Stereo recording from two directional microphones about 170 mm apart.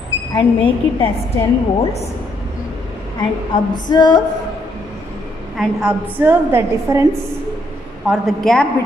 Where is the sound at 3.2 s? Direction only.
25° left (ahead or behind).